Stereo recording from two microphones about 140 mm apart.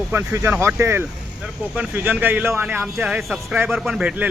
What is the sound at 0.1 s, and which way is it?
A man's voice, 15° right (ahead or behind).